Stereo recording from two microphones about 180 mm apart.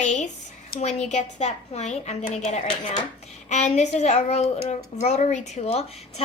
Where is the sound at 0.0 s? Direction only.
40° left (ahead or behind).